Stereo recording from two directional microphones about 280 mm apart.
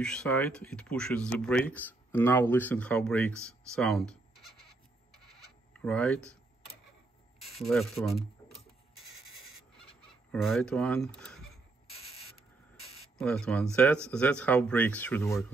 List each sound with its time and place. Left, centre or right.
0.0 s speech: centre
5.7 s speech: centre
7.5 s speech: centre
10.3 s speech: centre
13.2 s speech: centre